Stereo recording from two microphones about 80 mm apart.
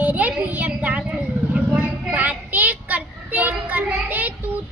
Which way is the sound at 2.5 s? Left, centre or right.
Right.